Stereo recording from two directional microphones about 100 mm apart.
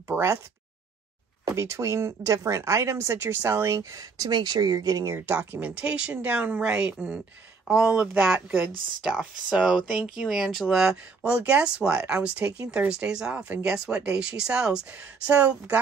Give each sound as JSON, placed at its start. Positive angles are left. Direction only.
{"t": 0.1, "sound": "speech", "side_deg": -25}
{"t": 1.4, "sound": "speech", "side_deg": -30}
{"t": 5.1, "sound": "speech", "side_deg": -25}